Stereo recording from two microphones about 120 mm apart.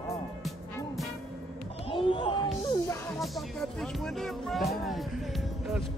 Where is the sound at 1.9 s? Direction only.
45° left (ahead or behind).